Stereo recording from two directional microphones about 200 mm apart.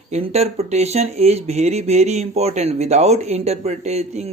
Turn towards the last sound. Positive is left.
turn(degrees=-35)  # may be behind; listen again after turning